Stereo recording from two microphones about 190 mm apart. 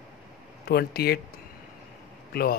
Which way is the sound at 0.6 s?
55° left (ahead or behind).